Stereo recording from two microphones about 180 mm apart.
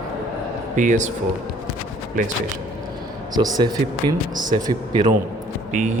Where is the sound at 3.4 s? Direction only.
20° right (ahead or behind).